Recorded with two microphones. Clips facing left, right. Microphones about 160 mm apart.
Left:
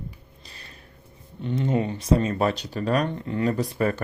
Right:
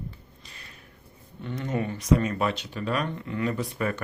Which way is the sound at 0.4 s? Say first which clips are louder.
Left 3 dB; 35° left (ahead or behind).